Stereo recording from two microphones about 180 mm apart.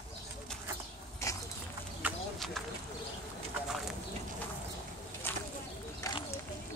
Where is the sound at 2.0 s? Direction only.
5° right (ahead or behind).